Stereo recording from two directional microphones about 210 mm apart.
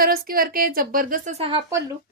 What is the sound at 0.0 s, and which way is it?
A woman's voice, 45° right (ahead or behind).